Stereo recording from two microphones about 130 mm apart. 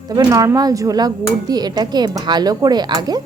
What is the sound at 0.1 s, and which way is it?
Speech, 30° right (ahead or behind).